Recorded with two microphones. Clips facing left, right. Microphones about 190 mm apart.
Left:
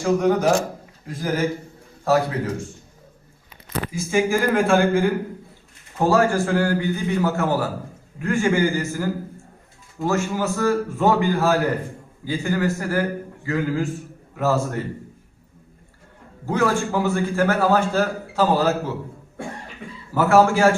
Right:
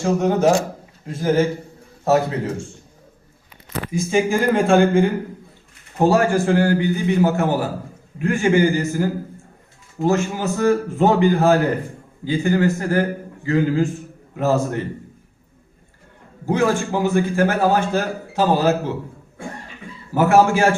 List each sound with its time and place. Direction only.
0.0 s a man's voice: 25° right (ahead or behind)
4.1 s a man's voice: 25° right (ahead or behind)
16.6 s a man's voice: 15° right (ahead or behind)
20.1 s a man's voice: 20° right (ahead or behind)